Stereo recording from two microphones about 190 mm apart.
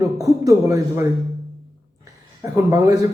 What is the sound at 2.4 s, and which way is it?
Speech, 15° right (ahead or behind).